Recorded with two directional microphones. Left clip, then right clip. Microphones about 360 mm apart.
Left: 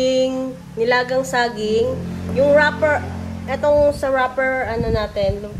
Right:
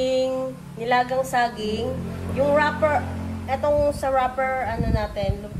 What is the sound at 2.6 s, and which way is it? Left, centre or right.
A woman's voice, left.